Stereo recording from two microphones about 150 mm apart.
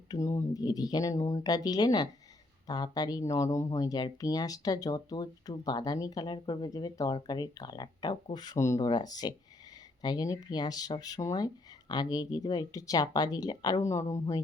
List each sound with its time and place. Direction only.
0.1 s speech: 20° left (ahead or behind)